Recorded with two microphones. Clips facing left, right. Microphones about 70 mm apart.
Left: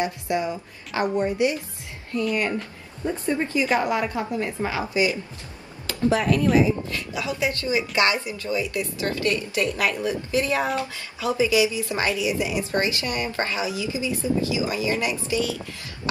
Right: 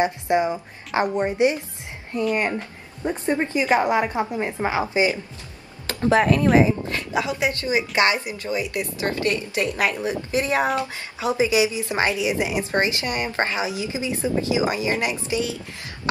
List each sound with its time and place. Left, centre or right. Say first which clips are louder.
0.0 s a woman's voice: right 4 dB; right
5.9 s a woman's voice: right 3 dB; right